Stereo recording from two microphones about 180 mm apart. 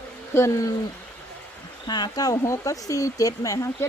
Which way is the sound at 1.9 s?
20° left (ahead or behind).